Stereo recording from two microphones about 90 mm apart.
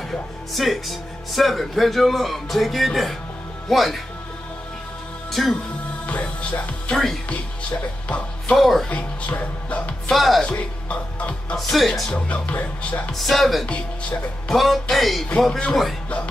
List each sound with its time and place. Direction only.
0.1 s speech: centre (ahead or behind)
5.3 s speech: 5° left (ahead or behind)
6.0 s speech: 15° left (ahead or behind)
8.5 s speech: centre (ahead or behind)
8.9 s speech: 15° left (ahead or behind)
10.1 s speech: centre (ahead or behind)
10.4 s speech: 15° left (ahead or behind)
11.5 s speech: centre (ahead or behind)
13.1 s speech: centre (ahead or behind)
13.7 s speech: 15° left (ahead or behind)
14.6 s speech: centre (ahead or behind)